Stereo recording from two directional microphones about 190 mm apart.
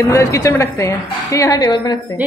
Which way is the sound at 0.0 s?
15° left (ahead or behind).